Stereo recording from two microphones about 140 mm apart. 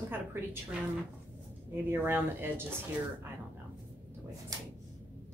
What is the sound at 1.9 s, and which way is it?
Speech, 15° right (ahead or behind).